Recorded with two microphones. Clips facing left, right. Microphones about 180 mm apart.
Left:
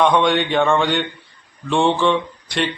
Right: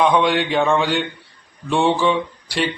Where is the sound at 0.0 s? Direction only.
Centre (ahead or behind).